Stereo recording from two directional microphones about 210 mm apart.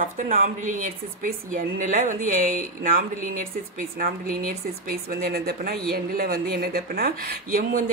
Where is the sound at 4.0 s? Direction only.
40° right (ahead or behind).